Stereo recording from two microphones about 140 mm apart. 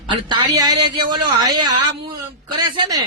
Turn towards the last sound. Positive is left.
turn(degrees=-25)  # may be behind; listen again after turning